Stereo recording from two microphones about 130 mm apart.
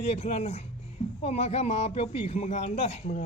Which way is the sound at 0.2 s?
60° left (ahead or behind).